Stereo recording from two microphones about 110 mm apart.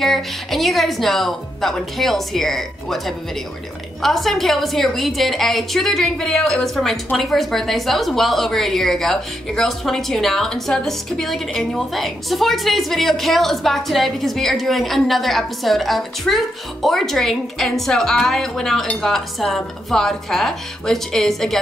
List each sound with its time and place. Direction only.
0.0 s a woman's voice: centre (ahead or behind)